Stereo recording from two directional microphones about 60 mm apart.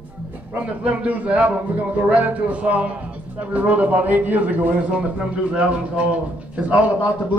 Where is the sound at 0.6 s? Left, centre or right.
Right.